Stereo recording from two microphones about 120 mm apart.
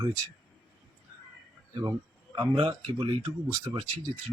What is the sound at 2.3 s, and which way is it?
Speech, 45° right (ahead or behind).